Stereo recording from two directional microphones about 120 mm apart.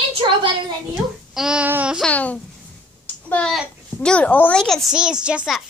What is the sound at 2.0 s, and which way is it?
A child's voice, 10° left (ahead or behind).